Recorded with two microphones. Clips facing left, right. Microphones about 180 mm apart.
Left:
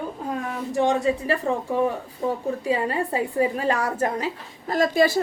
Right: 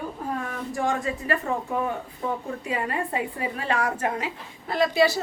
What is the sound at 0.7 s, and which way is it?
A woman's voice, 30° left (ahead or behind).